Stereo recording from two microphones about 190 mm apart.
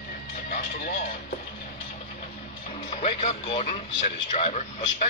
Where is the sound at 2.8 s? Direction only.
35° left (ahead or behind).